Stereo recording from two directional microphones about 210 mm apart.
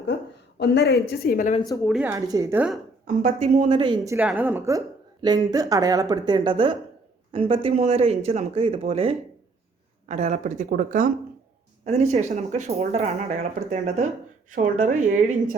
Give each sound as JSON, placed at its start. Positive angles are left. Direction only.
{"t": 0.6, "sound": "speech", "side_deg": 55}
{"t": 1.8, "sound": "a woman's voice", "side_deg": 0}
{"t": 2.0, "sound": "speech", "side_deg": -15}
{"t": 3.2, "sound": "speech", "side_deg": -35}
{"t": 12.1, "sound": "speech", "side_deg": -35}